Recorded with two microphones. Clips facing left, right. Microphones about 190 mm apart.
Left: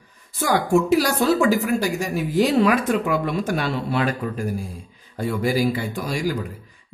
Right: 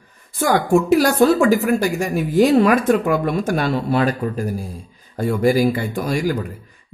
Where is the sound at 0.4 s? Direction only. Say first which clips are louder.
Right 3 dB; 50° right (ahead or behind).